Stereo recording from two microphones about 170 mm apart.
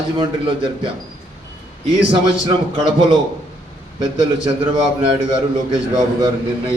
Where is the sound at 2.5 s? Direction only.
30° right (ahead or behind).